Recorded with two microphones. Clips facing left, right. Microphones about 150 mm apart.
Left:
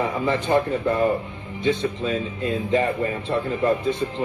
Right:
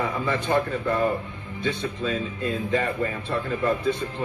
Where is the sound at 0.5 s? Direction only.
15° left (ahead or behind).